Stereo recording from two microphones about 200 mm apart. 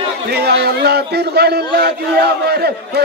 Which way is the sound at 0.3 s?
55° right (ahead or behind).